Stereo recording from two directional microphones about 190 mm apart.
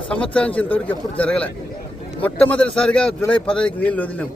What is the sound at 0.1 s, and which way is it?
Speech, 5° left (ahead or behind).